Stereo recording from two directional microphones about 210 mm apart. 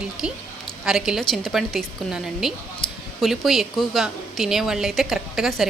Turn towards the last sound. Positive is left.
turn(degrees=0)  # may be behind; listen again after turning